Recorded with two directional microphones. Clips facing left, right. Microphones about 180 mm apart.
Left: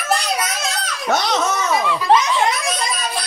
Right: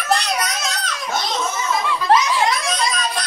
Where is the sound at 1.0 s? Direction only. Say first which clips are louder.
Left 5 dB; 70° left (ahead or behind).